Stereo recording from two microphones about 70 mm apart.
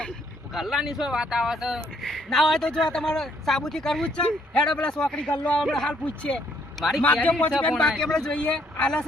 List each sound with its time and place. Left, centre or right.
0.5 s speech: centre
2.0 s speech: centre
6.7 s a man's voice: centre
7.0 s a man's voice: left
7.8 s speech: centre